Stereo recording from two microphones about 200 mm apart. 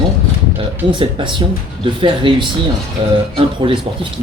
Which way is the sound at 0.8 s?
25° right (ahead or behind).